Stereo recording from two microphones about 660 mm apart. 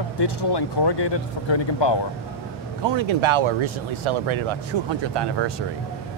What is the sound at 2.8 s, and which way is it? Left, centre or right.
Speech, right.